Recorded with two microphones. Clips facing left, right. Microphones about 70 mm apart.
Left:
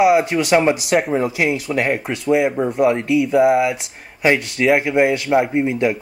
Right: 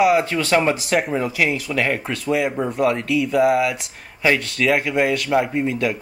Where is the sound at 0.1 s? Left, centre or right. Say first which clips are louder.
Left 3 dB; centre.